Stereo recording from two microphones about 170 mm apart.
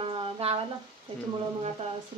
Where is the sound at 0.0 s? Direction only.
35° right (ahead or behind).